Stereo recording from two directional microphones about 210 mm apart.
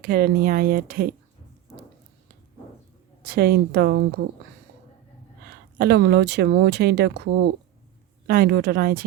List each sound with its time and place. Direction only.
0.0 s speech: 45° right (ahead or behind)
3.2 s speech: 50° right (ahead or behind)
5.7 s speech: 50° right (ahead or behind)